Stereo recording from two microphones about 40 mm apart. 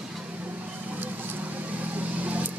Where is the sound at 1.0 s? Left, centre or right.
Right.